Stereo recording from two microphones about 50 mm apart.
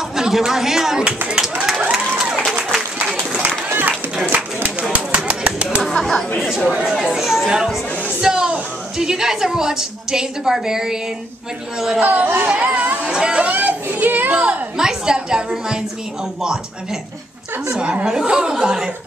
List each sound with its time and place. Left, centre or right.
0.1 s speech: centre
1.3 s a sound: centre
3.4 s run: right
4.9 s a sound: right
5.9 s chatter: centre
7.1 s a woman's voice: centre
12.0 s speech: right
13.1 s a woman's voice: centre
13.5 s a sound: right
14.3 s speech: right
14.8 s a woman's voice: centre
18.0 s a woman's voice: centre